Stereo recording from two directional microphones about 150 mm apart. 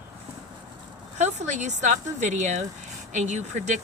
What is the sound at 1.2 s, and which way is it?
A woman's voice, 50° right (ahead or behind).